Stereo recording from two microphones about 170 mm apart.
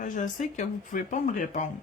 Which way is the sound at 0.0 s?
45° left (ahead or behind).